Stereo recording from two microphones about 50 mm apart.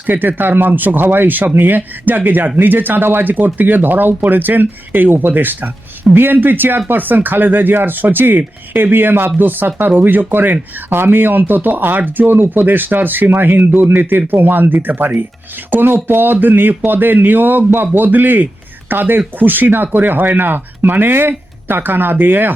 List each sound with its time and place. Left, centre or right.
0.0 s speech: right